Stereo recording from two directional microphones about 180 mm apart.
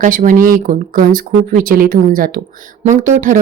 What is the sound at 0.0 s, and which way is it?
Speech, 45° right (ahead or behind).